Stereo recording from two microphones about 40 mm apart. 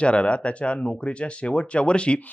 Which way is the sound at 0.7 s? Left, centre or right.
Left.